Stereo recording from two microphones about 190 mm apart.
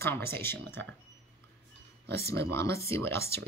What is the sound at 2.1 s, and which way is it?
Speech, 55° right (ahead or behind).